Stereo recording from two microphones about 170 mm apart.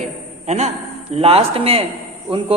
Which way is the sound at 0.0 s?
45° right (ahead or behind).